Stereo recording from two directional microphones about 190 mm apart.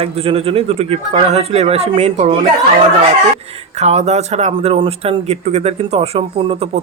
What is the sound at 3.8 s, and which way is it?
Speech, 35° right (ahead or behind).